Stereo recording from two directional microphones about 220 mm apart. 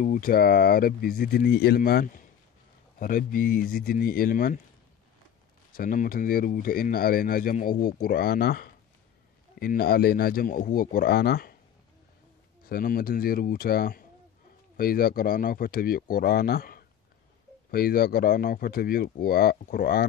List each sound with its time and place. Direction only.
0.0 s speech: 40° left (ahead or behind)
5.7 s speech: 40° left (ahead or behind)
12.6 s speech: 45° left (ahead or behind)